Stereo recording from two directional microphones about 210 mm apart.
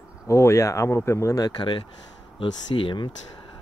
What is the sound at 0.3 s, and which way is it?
Speech, 15° left (ahead or behind).